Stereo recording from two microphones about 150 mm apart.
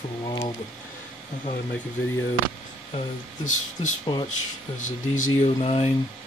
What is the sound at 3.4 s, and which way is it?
Speech, 55° left (ahead or behind).